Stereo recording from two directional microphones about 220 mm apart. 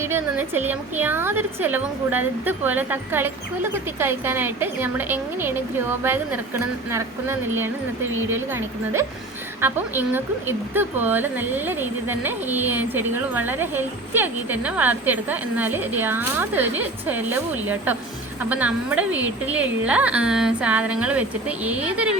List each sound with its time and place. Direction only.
0.0 s speech: 10° right (ahead or behind)